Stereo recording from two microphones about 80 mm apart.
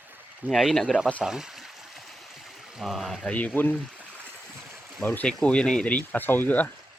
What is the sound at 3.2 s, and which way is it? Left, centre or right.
Speech, left.